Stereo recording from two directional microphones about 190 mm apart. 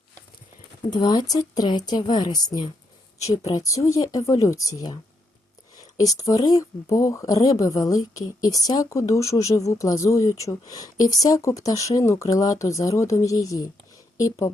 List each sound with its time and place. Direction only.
0.9 s a woman's voice: 25° left (ahead or behind)
6.0 s speech: 20° left (ahead or behind)